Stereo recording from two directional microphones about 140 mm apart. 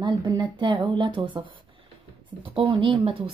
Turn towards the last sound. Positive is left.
turn(degrees=-40)  # may be behind; listen again after turning